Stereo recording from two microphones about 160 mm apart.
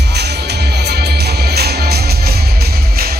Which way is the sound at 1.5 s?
85° right.